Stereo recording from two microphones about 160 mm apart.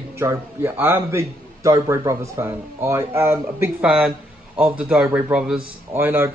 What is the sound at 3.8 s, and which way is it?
A man's voice, 5° right (ahead or behind).